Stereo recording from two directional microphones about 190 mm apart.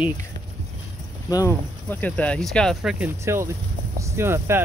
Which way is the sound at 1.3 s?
20° left (ahead or behind).